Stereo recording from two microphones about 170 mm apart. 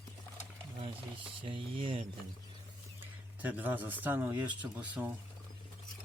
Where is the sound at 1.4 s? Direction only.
30° right (ahead or behind).